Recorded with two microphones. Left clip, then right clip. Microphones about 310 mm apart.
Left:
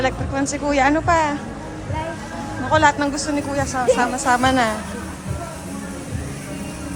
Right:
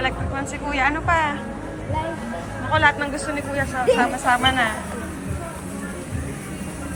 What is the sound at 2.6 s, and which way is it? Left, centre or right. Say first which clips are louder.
A woman's voice: left 2 dB; centre.